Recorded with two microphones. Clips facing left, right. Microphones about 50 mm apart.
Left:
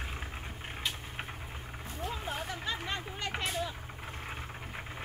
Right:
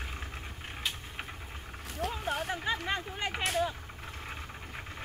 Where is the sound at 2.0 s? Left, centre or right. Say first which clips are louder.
Right 4 dB; right.